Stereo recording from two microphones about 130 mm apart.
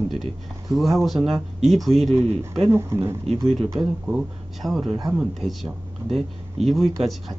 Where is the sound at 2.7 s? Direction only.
20° right (ahead or behind).